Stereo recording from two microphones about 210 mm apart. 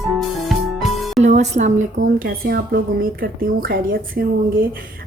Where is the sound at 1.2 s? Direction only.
30° right (ahead or behind).